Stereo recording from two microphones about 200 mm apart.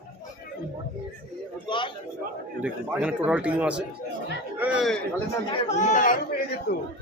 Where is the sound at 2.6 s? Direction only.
5° right (ahead or behind).